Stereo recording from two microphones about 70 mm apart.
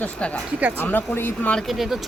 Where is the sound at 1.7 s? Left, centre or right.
Centre.